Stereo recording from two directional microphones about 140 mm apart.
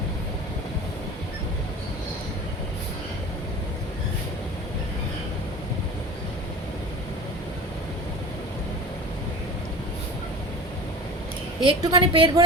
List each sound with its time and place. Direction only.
11.6 s a woman's voice: 30° right (ahead or behind)